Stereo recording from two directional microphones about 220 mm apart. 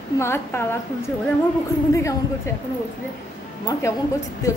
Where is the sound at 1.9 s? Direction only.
15° left (ahead or behind).